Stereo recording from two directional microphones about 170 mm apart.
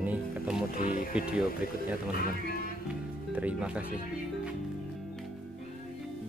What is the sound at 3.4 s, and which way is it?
Speech, 5° right (ahead or behind).